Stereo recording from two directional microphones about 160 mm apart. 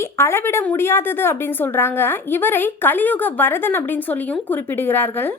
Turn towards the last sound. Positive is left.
turn(degrees=15)  # may be behind; listen again after turning